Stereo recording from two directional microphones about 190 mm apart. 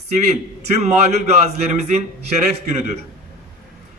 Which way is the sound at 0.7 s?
35° right (ahead or behind).